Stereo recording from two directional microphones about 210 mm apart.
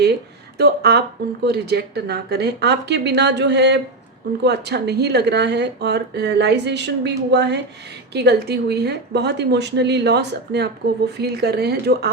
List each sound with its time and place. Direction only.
0.6 s speech: 50° right (ahead or behind)